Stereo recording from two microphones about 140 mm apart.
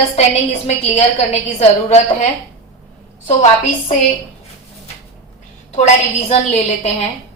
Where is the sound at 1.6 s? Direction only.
50° left (ahead or behind).